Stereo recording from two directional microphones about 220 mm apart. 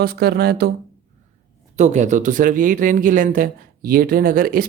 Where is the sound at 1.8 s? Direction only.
35° right (ahead or behind).